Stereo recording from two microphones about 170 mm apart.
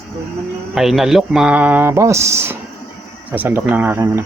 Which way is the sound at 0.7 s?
Centre (ahead or behind).